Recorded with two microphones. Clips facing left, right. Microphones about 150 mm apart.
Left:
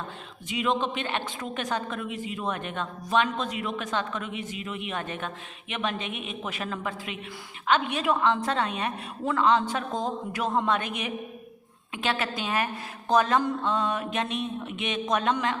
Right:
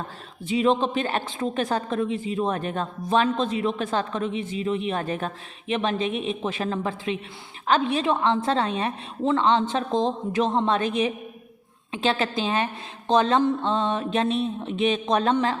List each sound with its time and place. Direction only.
0.4 s a man's voice: 30° right (ahead or behind)